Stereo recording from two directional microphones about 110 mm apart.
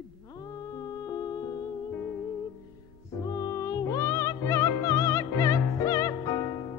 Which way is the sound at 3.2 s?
35° left (ahead or behind).